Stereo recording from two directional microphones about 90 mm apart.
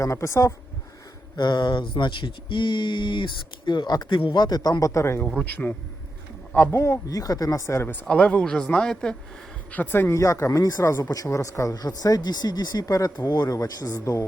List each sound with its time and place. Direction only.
0.0 s speech: 35° left (ahead or behind)
1.4 s speech: 55° left (ahead or behind)
4.2 s a man's voice: 65° left (ahead or behind)
4.4 s speech: 45° left (ahead or behind); by 5.3 s 30° left (ahead or behind)
5.5 s speech: 15° left (ahead or behind)
6.6 s speech: 25° left (ahead or behind)
8.0 s speech: 10° left (ahead or behind)
9.7 s speech: 20° left (ahead or behind)
10.2 s speech: 35° left (ahead or behind)